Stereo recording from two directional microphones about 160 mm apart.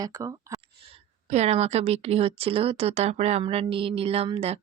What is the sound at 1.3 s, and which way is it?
Speech, 45° right (ahead or behind).